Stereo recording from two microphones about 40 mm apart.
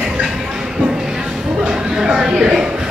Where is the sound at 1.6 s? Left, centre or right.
Centre.